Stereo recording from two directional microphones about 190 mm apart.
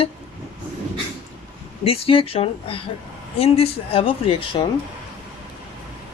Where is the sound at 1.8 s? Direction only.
30° left (ahead or behind).